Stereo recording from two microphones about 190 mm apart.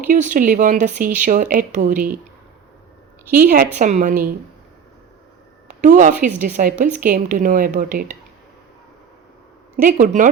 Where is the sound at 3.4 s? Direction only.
45° right (ahead or behind).